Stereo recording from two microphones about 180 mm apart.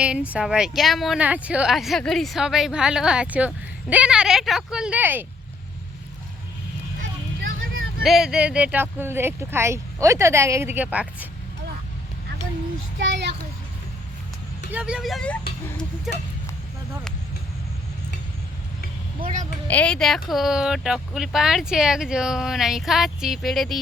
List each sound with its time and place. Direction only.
0.0 s speech: 5° right (ahead or behind)
8.0 s speech: centre (ahead or behind)
13.0 s a child's voice: 80° right
14.7 s speech: 5° right (ahead or behind)
19.6 s speech: 10° left (ahead or behind)